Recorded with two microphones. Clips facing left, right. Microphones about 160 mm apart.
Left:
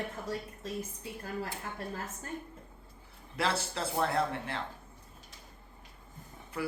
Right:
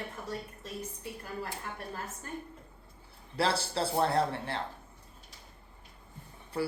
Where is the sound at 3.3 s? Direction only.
30° right (ahead or behind).